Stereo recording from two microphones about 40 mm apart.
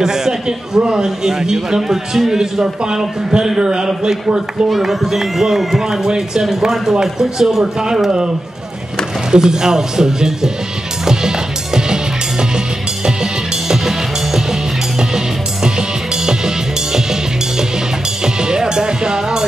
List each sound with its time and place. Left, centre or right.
0.0 s a man's voice: centre
4.6 s a man's voice: centre
9.3 s a man's voice: centre
11.1 s music: centre